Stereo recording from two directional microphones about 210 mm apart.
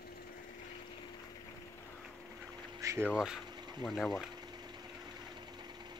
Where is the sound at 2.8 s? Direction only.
15° right (ahead or behind).